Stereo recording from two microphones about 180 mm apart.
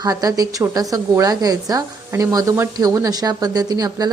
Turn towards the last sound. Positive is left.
turn(degrees=-20)  # may be behind; listen again after turning